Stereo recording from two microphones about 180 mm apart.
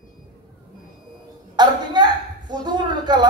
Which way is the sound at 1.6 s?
25° right (ahead or behind).